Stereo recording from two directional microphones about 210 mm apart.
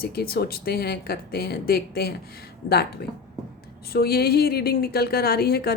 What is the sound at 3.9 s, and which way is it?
A woman's voice, 50° left (ahead or behind).